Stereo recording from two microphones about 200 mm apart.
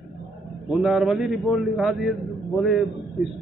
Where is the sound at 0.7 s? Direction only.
Centre (ahead or behind).